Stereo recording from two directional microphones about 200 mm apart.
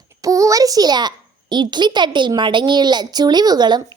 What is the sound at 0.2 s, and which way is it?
A child's voice, 15° right (ahead or behind).